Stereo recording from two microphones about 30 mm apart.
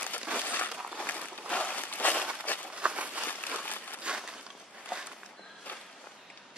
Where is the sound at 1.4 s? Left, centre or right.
Left.